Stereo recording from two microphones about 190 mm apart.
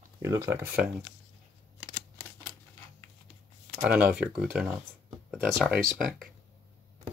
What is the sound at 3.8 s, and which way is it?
Speech, 5° right (ahead or behind).